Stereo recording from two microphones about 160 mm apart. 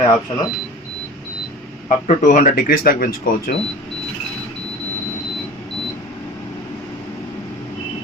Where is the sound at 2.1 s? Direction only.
50° left (ahead or behind).